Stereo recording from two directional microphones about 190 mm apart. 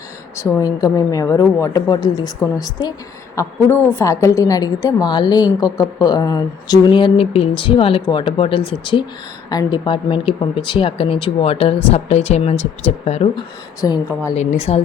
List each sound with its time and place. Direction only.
0.3 s a woman's voice: 15° left (ahead or behind); by 13.4 s 35° left (ahead or behind)
13.8 s a woman's voice: 20° left (ahead or behind)
14.3 s speech: 35° left (ahead or behind)